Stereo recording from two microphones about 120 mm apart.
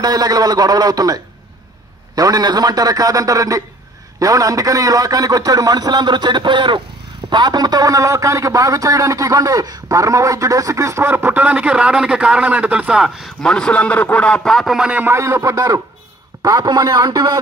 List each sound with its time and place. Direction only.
0.0 s a man's voice: 35° right (ahead or behind); by 13.5 s 5° right (ahead or behind)
13.5 s a man's voice: 10° left (ahead or behind); by 15.1 s 10° right (ahead or behind)
15.1 s a man's voice: 25° right (ahead or behind)